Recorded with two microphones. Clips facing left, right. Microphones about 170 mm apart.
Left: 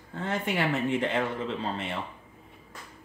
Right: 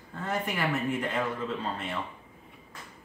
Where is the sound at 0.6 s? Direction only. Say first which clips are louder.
Left 3 dB; 25° left (ahead or behind).